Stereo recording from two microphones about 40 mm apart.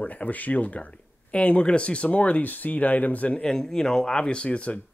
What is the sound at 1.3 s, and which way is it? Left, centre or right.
Speech, left.